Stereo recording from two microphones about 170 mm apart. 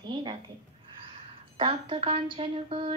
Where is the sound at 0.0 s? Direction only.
30° right (ahead or behind).